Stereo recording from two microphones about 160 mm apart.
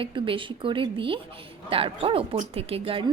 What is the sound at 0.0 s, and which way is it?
A woman's voice, 35° right (ahead or behind).